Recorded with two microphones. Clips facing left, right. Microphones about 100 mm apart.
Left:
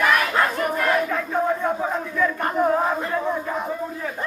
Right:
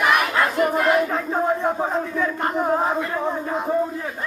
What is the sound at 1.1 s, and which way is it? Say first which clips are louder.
Speech: right 1 dB; 30° right (ahead or behind).